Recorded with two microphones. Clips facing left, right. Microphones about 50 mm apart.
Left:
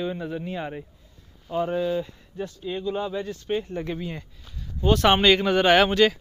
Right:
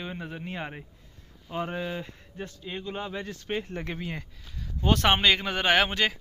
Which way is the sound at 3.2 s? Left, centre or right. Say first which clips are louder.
Left 5 dB; right.